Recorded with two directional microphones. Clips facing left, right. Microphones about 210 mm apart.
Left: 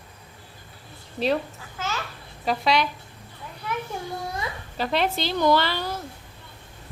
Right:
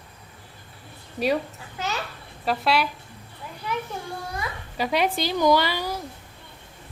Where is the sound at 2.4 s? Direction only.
5° right (ahead or behind).